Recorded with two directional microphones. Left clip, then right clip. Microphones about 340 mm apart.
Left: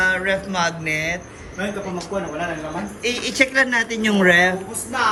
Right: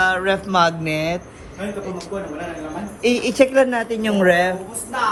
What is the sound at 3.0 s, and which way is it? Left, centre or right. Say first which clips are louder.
A man's voice: right 4 dB; centre.